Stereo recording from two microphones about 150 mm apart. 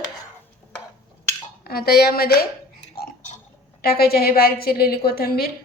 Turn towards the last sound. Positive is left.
turn(degrees=90)